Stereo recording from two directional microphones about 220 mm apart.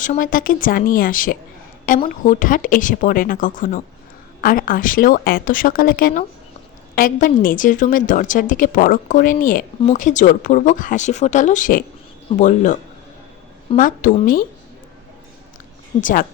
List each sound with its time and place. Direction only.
0.0 s a woman's voice: 35° left (ahead or behind)
16.0 s a woman's voice: 35° left (ahead or behind)